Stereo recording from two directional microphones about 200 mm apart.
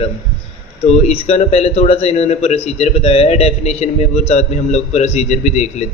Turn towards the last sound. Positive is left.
turn(degrees=35)  # may be behind; listen again after turning